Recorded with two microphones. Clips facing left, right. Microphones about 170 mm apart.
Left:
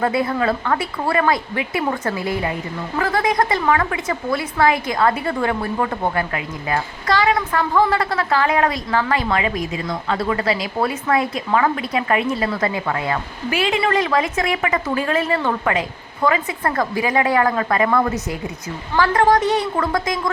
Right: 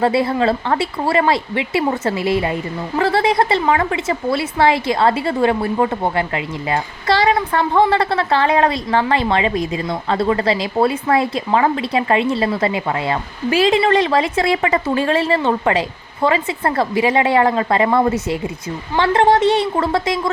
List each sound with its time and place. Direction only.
0.0 s a woman's voice: 30° right (ahead or behind)